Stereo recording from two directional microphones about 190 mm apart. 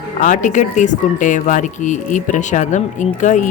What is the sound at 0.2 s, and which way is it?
Speech, 40° left (ahead or behind).